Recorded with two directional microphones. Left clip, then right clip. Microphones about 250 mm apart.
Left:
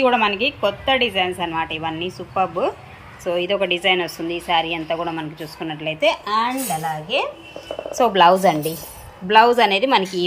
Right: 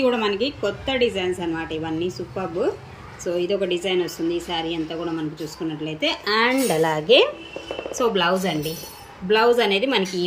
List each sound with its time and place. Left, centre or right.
0.0 s a woman's voice: centre
7.9 s a woman's voice: centre